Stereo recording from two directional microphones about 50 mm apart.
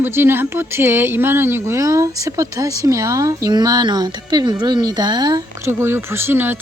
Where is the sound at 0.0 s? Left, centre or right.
Right.